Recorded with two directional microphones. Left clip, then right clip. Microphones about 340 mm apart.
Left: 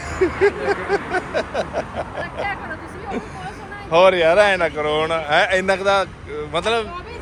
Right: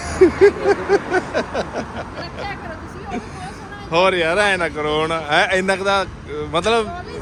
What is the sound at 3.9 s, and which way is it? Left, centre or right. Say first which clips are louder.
Speech: left 3 dB; centre.